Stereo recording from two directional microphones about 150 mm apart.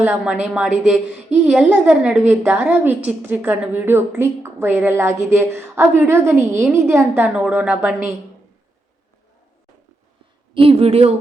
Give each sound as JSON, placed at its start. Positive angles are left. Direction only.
{"t": 0.0, "sound": "a woman's voice", "side_deg": -5}
{"t": 7.1, "sound": "a woman's voice", "side_deg": -5}
{"t": 10.5, "sound": "speech", "side_deg": -40}